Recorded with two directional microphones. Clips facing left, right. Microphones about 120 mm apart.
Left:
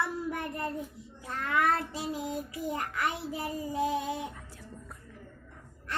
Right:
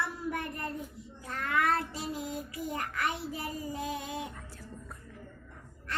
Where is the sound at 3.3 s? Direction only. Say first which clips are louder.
Left 3 dB; 15° left (ahead or behind).